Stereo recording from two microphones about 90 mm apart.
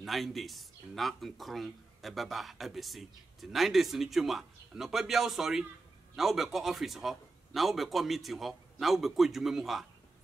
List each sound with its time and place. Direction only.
0.0 s speech: centre (ahead or behind)